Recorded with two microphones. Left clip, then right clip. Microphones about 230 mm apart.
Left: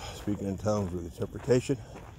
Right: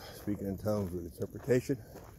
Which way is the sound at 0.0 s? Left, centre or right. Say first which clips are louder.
Left 4 dB; centre.